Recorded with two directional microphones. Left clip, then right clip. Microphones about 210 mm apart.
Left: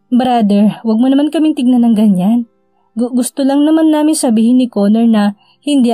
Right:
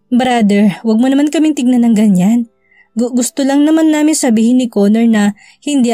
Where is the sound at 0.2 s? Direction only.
25° right (ahead or behind).